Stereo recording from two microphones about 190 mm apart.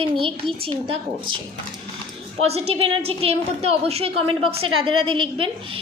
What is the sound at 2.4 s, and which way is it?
A woman's voice, 35° right (ahead or behind).